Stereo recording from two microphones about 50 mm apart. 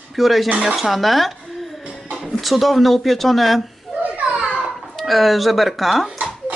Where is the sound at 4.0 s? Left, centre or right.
Right.